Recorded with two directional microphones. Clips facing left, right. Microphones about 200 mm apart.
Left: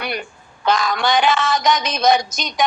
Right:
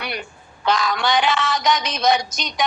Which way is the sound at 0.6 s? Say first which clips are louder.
Left 2 dB; 45° left (ahead or behind).